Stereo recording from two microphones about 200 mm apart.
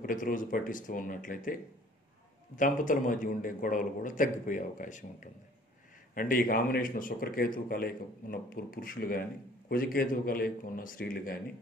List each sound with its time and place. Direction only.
0.0 s a man's voice: 40° left (ahead or behind)